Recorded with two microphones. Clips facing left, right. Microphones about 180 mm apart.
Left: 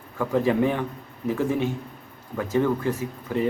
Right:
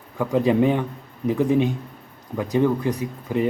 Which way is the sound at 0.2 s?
15° right (ahead or behind).